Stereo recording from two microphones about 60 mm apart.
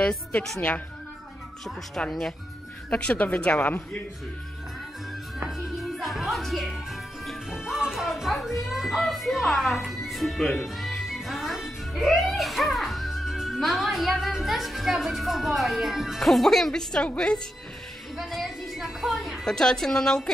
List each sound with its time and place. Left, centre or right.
0.6 s a woman's voice: left
2.0 s a woman's voice: centre
2.9 s a woman's voice: centre
5.5 s music: centre
17.1 s a woman's voice: centre
18.1 s a woman's voice: centre
19.4 s a woman's voice: centre